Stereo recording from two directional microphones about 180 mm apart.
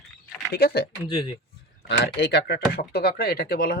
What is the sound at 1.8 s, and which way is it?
Speech, 70° left (ahead or behind).